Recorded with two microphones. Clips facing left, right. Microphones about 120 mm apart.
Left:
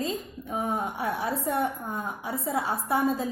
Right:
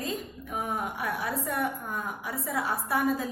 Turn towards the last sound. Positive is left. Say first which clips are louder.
# left 2 dB
turn(degrees=25)  # may be behind; listen again after turning